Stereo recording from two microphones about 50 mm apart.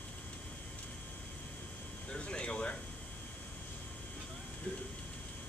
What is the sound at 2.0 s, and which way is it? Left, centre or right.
Air conditioning, left.